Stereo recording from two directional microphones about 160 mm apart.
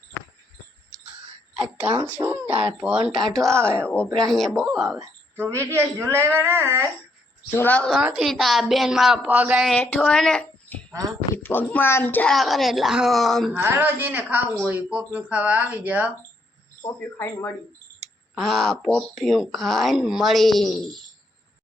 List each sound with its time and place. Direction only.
1.5 s a woman's voice: 5° right (ahead or behind)
3.6 s a woman's voice: 15° right (ahead or behind)
3.8 s speech: 5° left (ahead or behind)
5.4 s a woman's voice: 20° right (ahead or behind)
7.5 s speech: 10° left (ahead or behind); by 9.6 s 10° right (ahead or behind)
9.6 s speech: 10° left (ahead or behind)
13.6 s a woman's voice: 15° right (ahead or behind)
16.8 s speech: 15° left (ahead or behind)
18.3 s speech: centre (ahead or behind)